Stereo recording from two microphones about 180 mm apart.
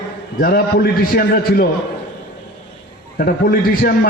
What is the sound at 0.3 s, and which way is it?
A man's voice, 55° left (ahead or behind).